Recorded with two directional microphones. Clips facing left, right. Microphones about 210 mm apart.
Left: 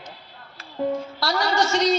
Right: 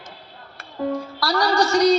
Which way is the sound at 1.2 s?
25° left (ahead or behind).